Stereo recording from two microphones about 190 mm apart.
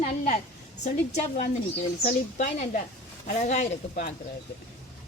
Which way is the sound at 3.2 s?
40° left (ahead or behind).